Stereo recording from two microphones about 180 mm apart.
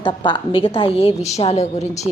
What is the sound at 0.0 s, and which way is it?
A woman's voice, 25° left (ahead or behind).